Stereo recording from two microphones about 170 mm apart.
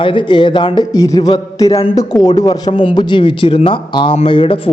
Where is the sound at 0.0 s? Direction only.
30° left (ahead or behind).